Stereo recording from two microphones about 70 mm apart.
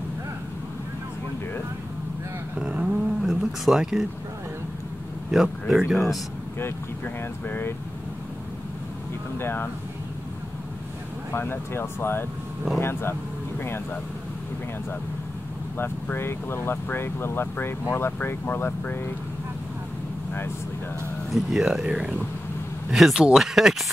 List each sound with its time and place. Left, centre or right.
2.6 s a sound: centre
5.3 s speech: centre
7.4 s speech: left
9.4 s speech: left
11.3 s speech: left
15.8 s speech: left
21.3 s speech: centre